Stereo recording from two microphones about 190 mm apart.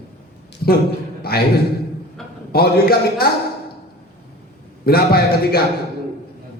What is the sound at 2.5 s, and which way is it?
Speech, 55° left (ahead or behind).